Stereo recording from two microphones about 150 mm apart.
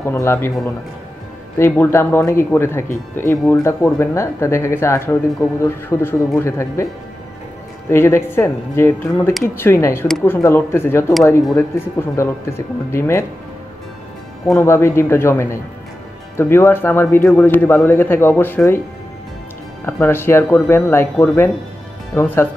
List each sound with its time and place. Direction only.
0.0 s speech: 20° left (ahead or behind)
1.6 s speech: 15° left (ahead or behind)
7.9 s speech: 15° left (ahead or behind)
14.4 s speech: 15° left (ahead or behind)
19.9 s speech: 15° left (ahead or behind)